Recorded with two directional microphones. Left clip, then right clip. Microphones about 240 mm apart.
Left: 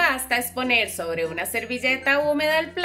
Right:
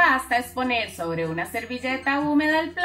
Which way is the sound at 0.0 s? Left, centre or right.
Left.